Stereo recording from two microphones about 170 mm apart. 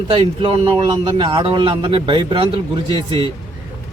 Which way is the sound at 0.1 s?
30° right (ahead or behind).